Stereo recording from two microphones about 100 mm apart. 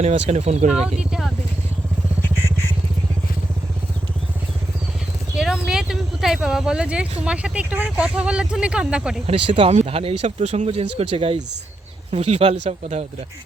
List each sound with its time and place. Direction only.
0.0 s speech: 90° right
0.7 s speech: 5° right (ahead or behind)
5.4 s speech: 5° right (ahead or behind)
9.2 s speech: 60° right (ahead or behind)
12.1 s speech: 90° right